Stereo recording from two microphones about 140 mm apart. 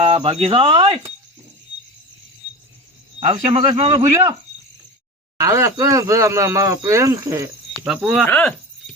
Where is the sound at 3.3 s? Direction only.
45° right (ahead or behind).